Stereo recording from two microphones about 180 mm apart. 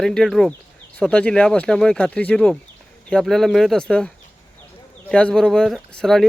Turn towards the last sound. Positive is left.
turn(degrees=0)  # may be behind; listen again after turning